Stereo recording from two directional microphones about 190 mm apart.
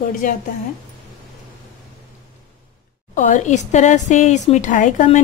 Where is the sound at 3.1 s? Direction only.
40° left (ahead or behind).